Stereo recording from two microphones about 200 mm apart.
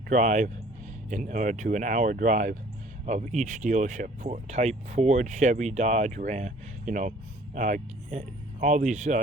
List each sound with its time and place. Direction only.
0.1 s speech: 40° right (ahead or behind)